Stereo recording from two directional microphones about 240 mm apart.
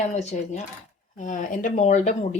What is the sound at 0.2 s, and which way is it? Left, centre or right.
Speech, left.